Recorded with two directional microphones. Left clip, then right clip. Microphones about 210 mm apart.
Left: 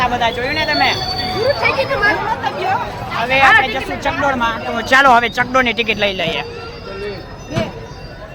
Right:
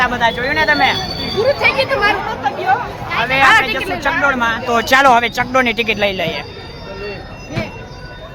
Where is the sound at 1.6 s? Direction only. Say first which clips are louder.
Right 1 dB; 30° right (ahead or behind).